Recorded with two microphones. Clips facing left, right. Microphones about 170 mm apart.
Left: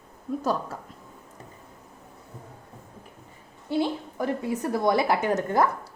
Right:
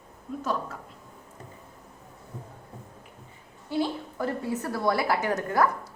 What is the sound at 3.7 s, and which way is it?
A woman's voice, 20° left (ahead or behind).